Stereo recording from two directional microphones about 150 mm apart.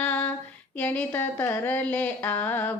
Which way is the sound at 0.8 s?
10° left (ahead or behind).